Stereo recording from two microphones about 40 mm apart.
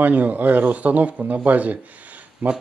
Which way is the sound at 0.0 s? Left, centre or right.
Right.